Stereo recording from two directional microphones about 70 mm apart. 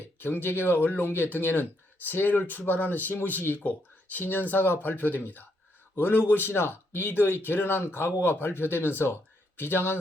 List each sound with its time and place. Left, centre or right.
0.2 s speech: left